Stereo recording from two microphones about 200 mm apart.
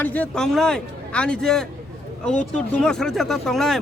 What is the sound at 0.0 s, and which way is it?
Speech, 10° left (ahead or behind).